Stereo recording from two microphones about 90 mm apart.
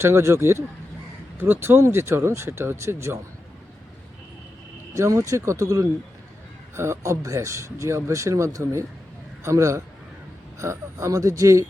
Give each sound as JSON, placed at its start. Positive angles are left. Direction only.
{"t": 0.0, "sound": "speech", "side_deg": -30}
{"t": 4.9, "sound": "speech", "side_deg": -35}